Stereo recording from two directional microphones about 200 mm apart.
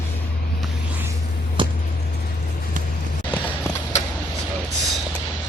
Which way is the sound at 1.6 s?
25° right (ahead or behind).